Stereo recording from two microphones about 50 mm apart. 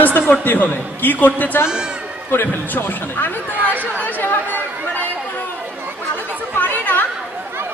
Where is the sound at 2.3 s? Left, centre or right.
Left.